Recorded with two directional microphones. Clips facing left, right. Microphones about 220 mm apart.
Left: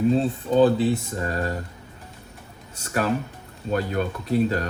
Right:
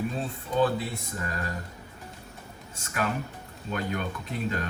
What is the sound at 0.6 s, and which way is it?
Speech, 30° left (ahead or behind).